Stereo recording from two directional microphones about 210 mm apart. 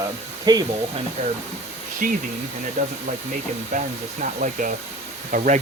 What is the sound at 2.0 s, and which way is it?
Speech, 40° right (ahead or behind).